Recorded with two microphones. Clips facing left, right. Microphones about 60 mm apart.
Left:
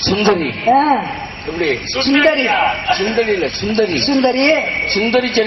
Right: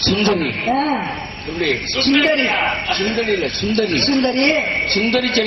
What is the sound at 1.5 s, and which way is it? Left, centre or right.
A man's voice, left.